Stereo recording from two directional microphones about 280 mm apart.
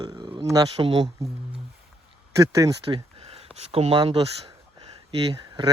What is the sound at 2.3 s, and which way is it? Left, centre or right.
Speech, centre.